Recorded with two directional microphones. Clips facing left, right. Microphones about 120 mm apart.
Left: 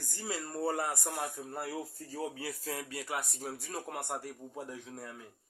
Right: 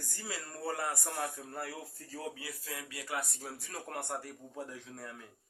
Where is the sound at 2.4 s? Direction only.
35° left (ahead or behind).